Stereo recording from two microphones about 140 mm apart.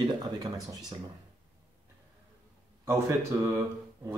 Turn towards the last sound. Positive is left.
turn(degrees=-20)  # may be behind; listen again after turning